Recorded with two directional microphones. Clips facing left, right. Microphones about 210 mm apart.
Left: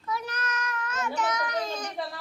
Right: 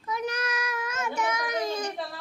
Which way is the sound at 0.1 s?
10° right (ahead or behind).